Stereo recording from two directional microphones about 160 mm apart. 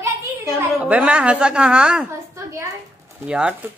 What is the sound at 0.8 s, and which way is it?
A man's voice, 10° right (ahead or behind).